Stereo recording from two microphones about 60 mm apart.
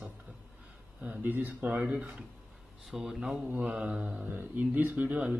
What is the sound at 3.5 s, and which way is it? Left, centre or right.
A man's voice, right.